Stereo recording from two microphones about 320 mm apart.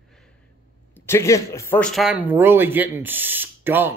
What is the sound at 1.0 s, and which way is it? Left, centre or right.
Speech, centre.